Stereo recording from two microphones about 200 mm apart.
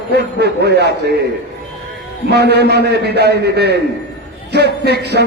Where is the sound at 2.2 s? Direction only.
55° right (ahead or behind).